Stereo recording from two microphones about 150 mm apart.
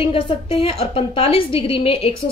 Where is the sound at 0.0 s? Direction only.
40° left (ahead or behind).